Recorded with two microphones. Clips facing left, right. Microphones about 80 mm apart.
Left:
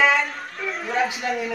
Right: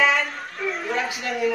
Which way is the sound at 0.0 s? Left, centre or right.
Centre.